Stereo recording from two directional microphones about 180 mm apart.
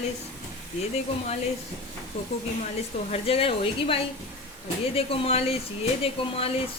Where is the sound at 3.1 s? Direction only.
30° left (ahead or behind).